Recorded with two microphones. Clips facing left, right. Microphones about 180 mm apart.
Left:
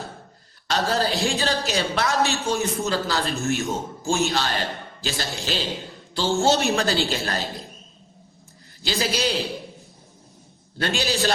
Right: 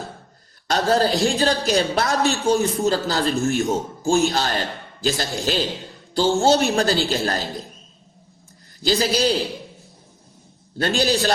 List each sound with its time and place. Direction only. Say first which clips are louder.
0.7 s a woman's voice: right 4 dB; 45° right (ahead or behind)
8.8 s a woman's voice: right 5 dB; 40° right (ahead or behind)
10.8 s a woman's voice: right 4 dB; 45° right (ahead or behind)